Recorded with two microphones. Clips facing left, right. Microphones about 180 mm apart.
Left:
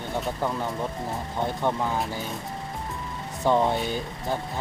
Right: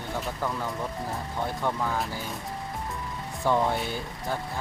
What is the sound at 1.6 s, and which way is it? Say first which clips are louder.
Speech: left 3 dB; 20° left (ahead or behind).